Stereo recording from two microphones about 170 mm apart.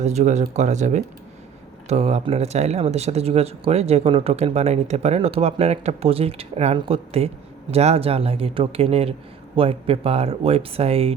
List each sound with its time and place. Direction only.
0.0 s speech: 40° right (ahead or behind)